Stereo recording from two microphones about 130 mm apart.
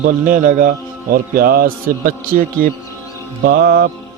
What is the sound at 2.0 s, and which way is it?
A man's voice, 90° right.